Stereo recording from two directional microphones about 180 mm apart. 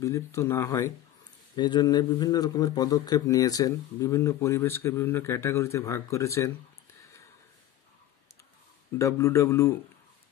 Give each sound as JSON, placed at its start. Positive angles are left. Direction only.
{"t": 0.0, "sound": "a man's voice", "side_deg": 15}
{"t": 8.9, "sound": "a man's voice", "side_deg": 15}